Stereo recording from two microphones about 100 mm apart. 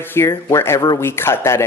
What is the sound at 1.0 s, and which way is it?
Speech, 25° left (ahead or behind).